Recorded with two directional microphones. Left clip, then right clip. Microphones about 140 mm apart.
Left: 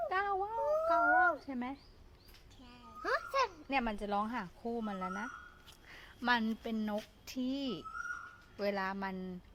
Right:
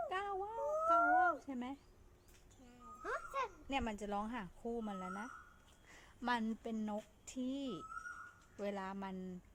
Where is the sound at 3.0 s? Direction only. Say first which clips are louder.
Left 8 dB; 55° left (ahead or behind).